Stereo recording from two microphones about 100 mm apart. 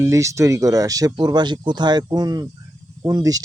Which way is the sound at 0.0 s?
30° right (ahead or behind).